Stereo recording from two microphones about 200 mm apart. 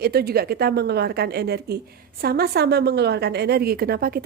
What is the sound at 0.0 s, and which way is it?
A woman's voice, 50° right (ahead or behind).